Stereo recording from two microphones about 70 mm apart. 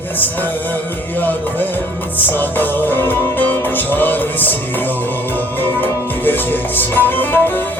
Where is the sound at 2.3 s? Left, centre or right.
Left.